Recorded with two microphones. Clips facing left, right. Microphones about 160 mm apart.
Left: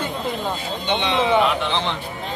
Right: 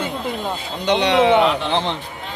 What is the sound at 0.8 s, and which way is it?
Speech, 85° right.